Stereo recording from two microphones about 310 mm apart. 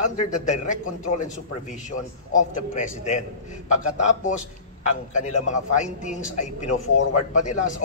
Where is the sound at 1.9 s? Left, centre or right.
Left.